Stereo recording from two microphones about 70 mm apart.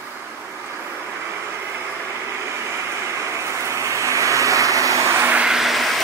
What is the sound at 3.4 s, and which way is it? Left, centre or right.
Vehicle, right.